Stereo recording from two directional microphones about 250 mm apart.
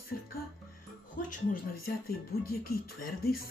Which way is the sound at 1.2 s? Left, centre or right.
Left.